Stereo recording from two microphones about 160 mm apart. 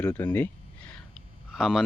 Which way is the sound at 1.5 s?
5° right (ahead or behind).